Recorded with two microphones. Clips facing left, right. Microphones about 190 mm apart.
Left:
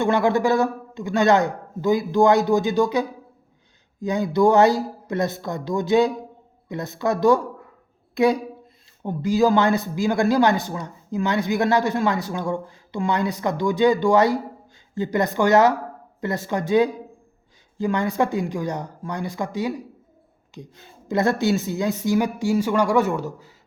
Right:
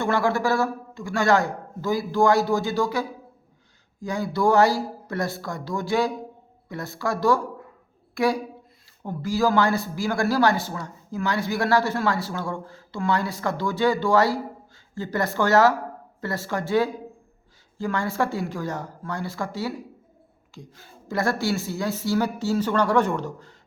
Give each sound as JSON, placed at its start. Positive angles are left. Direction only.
{"t": 0.0, "sound": "a woman's voice", "side_deg": 20}